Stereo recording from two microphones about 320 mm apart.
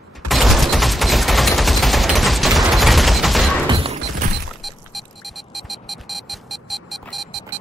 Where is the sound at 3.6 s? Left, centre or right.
Centre.